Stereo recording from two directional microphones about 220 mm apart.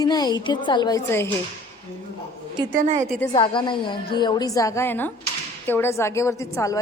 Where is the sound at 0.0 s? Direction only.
20° left (ahead or behind).